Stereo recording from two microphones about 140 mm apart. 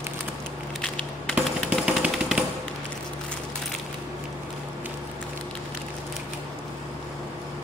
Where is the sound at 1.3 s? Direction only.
10° right (ahead or behind).